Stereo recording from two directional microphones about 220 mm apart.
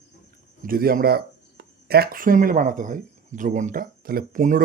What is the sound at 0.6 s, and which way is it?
Speech, 40° right (ahead or behind).